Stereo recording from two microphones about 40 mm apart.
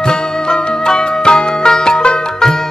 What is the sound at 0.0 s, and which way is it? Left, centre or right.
Music, centre.